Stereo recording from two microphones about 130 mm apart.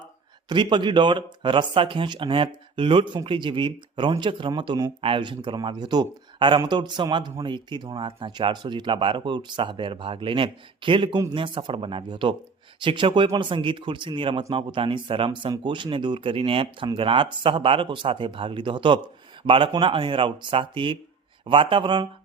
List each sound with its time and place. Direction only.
0.4 s speech: 35° right (ahead or behind)